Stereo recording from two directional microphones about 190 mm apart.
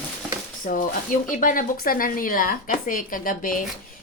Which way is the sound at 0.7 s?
40° left (ahead or behind).